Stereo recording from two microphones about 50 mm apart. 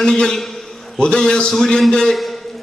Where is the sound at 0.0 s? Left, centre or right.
Centre.